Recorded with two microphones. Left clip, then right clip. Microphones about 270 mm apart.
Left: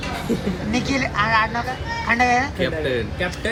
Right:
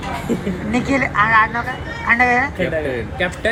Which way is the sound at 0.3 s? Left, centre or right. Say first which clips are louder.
Right 2 dB; centre.